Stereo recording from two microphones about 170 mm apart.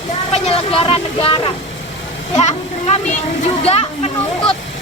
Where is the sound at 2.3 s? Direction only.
35° left (ahead or behind).